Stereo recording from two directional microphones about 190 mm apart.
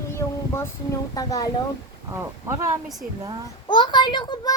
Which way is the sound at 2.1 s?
15° right (ahead or behind).